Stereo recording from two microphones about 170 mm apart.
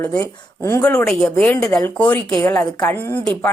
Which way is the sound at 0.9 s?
5° left (ahead or behind).